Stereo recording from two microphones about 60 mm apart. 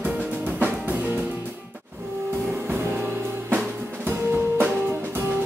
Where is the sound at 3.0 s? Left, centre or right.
Right.